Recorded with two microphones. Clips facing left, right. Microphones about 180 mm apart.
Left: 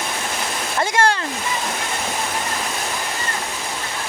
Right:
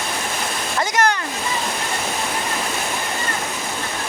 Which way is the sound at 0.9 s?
25° left (ahead or behind).